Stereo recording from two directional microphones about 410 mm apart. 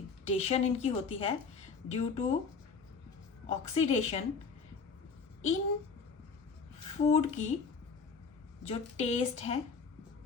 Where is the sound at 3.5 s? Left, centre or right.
Centre.